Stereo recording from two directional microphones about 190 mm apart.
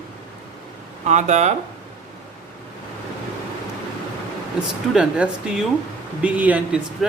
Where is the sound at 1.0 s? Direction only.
40° right (ahead or behind).